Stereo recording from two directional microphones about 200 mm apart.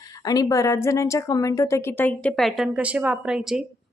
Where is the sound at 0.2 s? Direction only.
20° left (ahead or behind).